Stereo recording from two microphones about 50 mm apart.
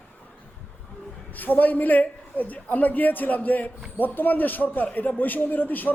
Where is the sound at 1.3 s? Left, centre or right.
Left.